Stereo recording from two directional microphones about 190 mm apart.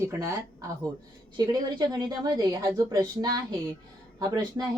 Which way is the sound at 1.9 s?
20° right (ahead or behind).